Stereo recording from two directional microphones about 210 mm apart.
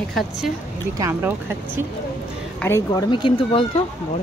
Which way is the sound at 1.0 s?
10° right (ahead or behind).